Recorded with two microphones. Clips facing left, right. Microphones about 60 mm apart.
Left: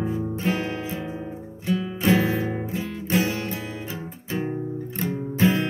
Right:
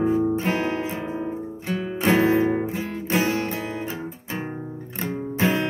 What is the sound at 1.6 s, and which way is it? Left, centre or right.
Music, right.